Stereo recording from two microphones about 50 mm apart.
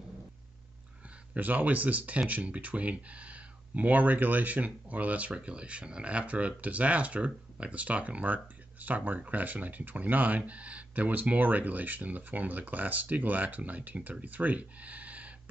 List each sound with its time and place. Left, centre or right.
1.3 s speech: right